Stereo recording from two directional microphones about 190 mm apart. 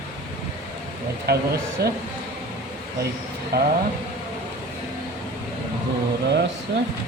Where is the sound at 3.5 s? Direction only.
55° right (ahead or behind).